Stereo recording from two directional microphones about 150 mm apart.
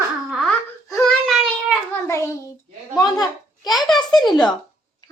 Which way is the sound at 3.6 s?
Centre (ahead or behind).